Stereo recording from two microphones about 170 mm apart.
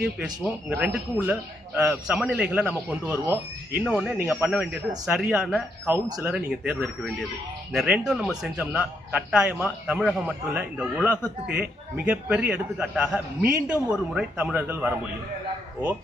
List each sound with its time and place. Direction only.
0.0 s a man's voice: 5° right (ahead or behind)
4.2 s a man's voice: 15° right (ahead or behind)
6.1 s speech: 20° right (ahead or behind)
6.3 s a man's voice: 5° right (ahead or behind)